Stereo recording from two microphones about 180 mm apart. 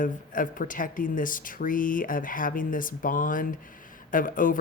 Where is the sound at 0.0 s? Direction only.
50° left (ahead or behind).